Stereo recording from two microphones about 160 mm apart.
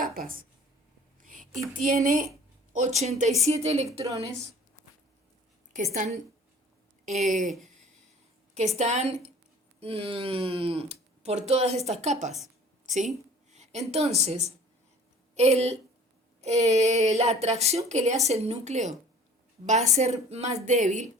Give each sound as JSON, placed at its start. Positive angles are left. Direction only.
{"t": 0.0, "sound": "speech", "side_deg": -60}
{"t": 1.7, "sound": "a woman's voice", "side_deg": -55}
{"t": 3.8, "sound": "a woman's voice", "side_deg": -20}
{"t": 5.7, "sound": "a woman's voice", "side_deg": -50}
{"t": 7.6, "sound": "a sound", "side_deg": -50}
{"t": 8.5, "sound": "a woman's voice", "side_deg": -45}
{"t": 12.8, "sound": "a sound", "side_deg": -50}
{"t": 13.5, "sound": "a woman's voice", "side_deg": -45}